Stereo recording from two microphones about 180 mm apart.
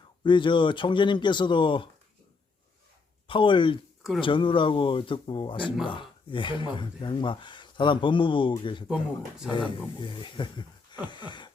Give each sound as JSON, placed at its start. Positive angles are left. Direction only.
{"t": 0.3, "sound": "speech", "side_deg": 25}
{"t": 3.2, "sound": "speech", "side_deg": 30}